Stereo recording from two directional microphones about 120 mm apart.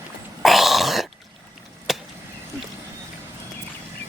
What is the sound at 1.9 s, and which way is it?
Chop, centre (ahead or behind).